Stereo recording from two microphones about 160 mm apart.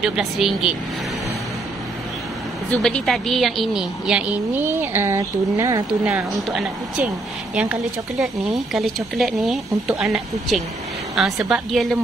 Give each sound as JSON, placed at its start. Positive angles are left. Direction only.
{"t": 0.0, "sound": "a woman's voice", "side_deg": 0}
{"t": 2.7, "sound": "a woman's voice", "side_deg": 5}
{"t": 6.3, "sound": "a woman's voice", "side_deg": 0}